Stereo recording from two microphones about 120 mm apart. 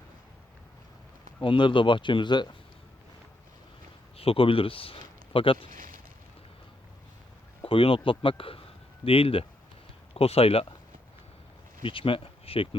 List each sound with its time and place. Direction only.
1.4 s speech: 45° left (ahead or behind)
4.2 s speech: 50° left (ahead or behind)
7.6 s speech: 50° left (ahead or behind)
11.8 s speech: 45° left (ahead or behind)